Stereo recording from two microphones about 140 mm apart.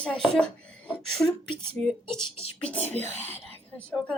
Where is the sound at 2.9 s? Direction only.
50° right (ahead or behind).